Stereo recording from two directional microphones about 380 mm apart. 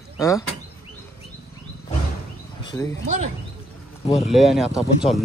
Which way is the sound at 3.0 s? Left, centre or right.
Centre.